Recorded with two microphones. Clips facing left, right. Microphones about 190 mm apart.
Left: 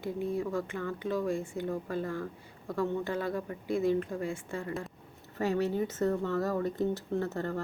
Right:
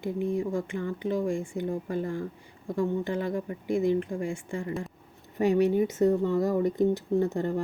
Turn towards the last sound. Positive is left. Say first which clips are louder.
# right 6 dB
turn(degrees=-15)  # may be behind; listen again after turning